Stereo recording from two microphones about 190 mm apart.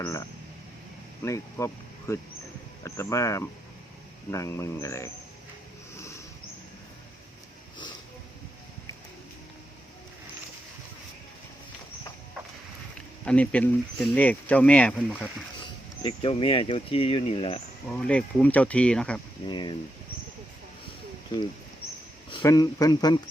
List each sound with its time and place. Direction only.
0.0 s speech: 15° left (ahead or behind)
6.0 s a sound: 15° left (ahead or behind)
13.2 s speech: 5° left (ahead or behind)
16.0 s speech: 30° left (ahead or behind)
17.8 s speech: 5° left (ahead or behind)
19.5 s speech: 25° left (ahead or behind)
22.3 s speech: 25° left (ahead or behind)